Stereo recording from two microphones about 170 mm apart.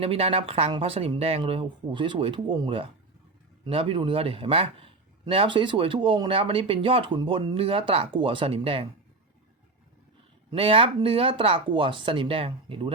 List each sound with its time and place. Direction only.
0.0 s a man's voice: 35° right (ahead or behind)
10.5 s a man's voice: 35° right (ahead or behind)